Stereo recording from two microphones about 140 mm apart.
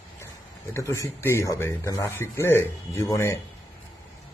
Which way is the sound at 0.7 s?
20° left (ahead or behind).